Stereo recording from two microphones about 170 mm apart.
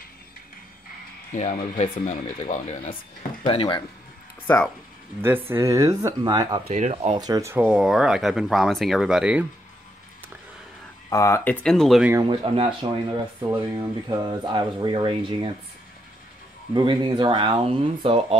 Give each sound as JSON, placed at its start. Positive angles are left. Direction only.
{"t": 1.3, "sound": "speech", "side_deg": 40}
{"t": 5.5, "sound": "speech", "side_deg": -20}
{"t": 6.7, "sound": "speech", "side_deg": -45}
{"t": 7.2, "sound": "speech", "side_deg": -20}
{"t": 7.5, "sound": "speech", "side_deg": -5}
{"t": 11.1, "sound": "speech", "side_deg": 20}
{"t": 12.1, "sound": "speech", "side_deg": -20}
{"t": 16.7, "sound": "speech", "side_deg": -25}